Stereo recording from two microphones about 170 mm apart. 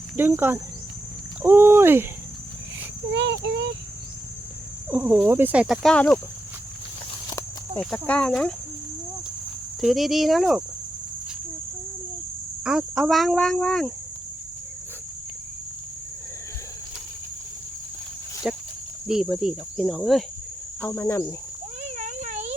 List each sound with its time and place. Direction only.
0.2 s speech: 10° right (ahead or behind)
3.2 s speech: 90° right
4.9 s speech: 10° right (ahead or behind)
7.8 s speech: 10° left (ahead or behind)
9.8 s speech: centre (ahead or behind)
12.6 s speech: 5° right (ahead or behind)
18.5 s a sound: 10° right (ahead or behind)
19.0 s speech: 5° right (ahead or behind)
20.8 s speech: 15° left (ahead or behind)
21.8 s a sound: 45° right (ahead or behind)